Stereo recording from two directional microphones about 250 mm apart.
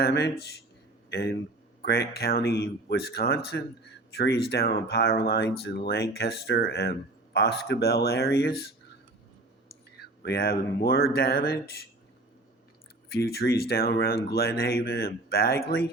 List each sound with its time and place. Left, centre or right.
0.0 s speech: left
10.0 s speech: left
13.1 s speech: left